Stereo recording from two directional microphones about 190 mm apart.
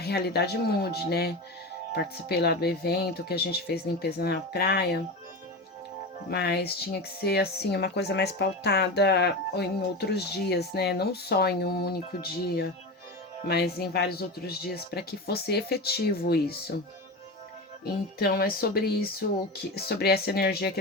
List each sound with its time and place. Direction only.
0.0 s speech: 55° left (ahead or behind)
6.3 s speech: 60° left (ahead or behind)
18.2 s speech: 50° left (ahead or behind)